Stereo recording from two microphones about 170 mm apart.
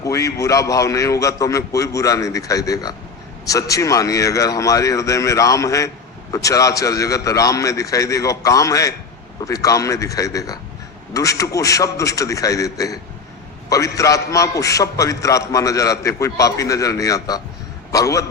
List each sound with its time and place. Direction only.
0.0 s a man's voice: 20° left (ahead or behind)